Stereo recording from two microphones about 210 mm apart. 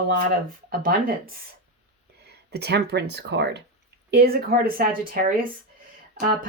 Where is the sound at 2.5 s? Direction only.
50° right (ahead or behind).